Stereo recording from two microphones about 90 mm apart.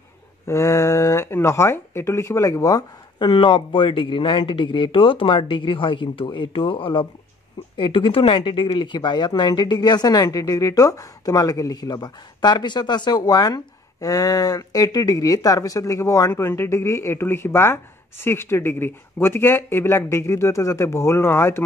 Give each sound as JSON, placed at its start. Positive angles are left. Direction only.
{"t": 0.5, "sound": "speech", "side_deg": 35}
{"t": 3.3, "sound": "speech", "side_deg": 65}